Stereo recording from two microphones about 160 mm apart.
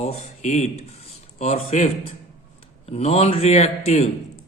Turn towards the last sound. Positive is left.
turn(degrees=40)  # may be behind; listen again after turning